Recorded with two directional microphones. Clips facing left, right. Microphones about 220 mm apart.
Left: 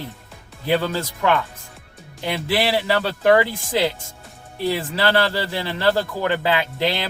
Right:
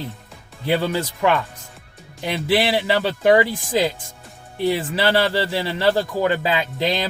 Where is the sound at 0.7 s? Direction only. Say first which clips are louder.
Even; 15° right (ahead or behind).